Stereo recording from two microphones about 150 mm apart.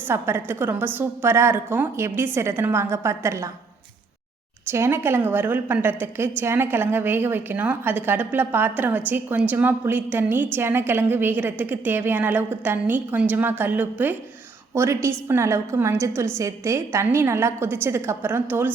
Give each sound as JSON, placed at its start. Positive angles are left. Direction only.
{"t": 0.1, "sound": "a woman's voice", "side_deg": -15}
{"t": 4.7, "sound": "a woman's voice", "side_deg": -15}